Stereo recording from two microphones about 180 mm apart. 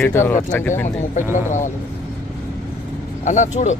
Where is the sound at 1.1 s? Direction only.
45° left (ahead or behind).